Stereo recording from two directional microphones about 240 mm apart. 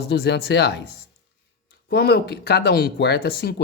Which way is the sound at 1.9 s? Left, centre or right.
Left.